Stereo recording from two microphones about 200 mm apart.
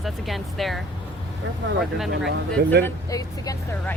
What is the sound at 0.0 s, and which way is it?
Speech, centre (ahead or behind).